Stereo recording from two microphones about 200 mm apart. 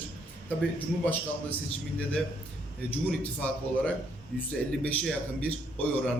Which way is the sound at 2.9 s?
5° left (ahead or behind).